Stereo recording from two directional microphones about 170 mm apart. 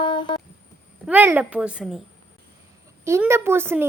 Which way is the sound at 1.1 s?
10° right (ahead or behind).